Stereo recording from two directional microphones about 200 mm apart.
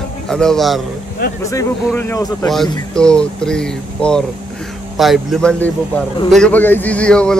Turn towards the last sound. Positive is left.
turn(degrees=5)  # may be behind; listen again after turning